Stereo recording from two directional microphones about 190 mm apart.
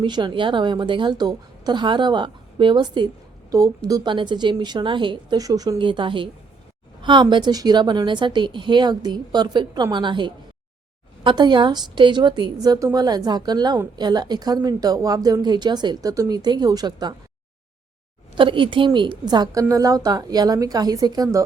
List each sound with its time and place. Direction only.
0.0 s speech: 25° right (ahead or behind)
18.3 s speech: 25° right (ahead or behind)